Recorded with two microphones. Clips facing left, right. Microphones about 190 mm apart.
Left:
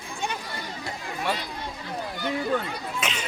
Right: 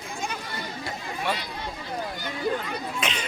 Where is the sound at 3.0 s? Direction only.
5° left (ahead or behind).